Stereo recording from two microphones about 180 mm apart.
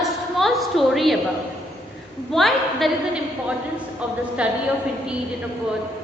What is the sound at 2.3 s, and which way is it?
Speech, centre (ahead or behind).